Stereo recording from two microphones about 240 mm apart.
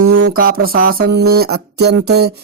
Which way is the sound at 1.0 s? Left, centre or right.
Right.